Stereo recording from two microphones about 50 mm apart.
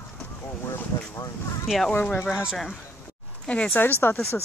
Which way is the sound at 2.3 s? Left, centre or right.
Centre.